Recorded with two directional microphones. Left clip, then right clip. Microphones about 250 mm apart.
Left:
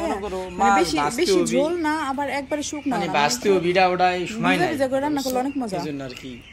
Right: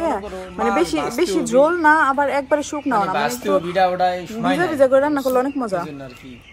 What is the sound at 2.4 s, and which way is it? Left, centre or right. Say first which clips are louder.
Speech: right 6 dB; right.